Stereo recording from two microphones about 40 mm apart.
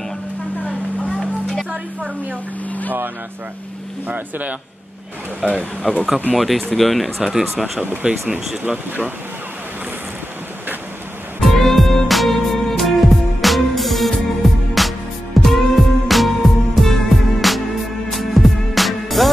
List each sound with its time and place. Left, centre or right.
1.1 s a sound: centre
4.1 s speech: right
5.4 s speech: centre
8.0 s speech: right
11.4 s music: centre